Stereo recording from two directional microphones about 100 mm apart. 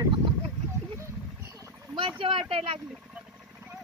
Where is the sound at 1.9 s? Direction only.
60° right (ahead or behind).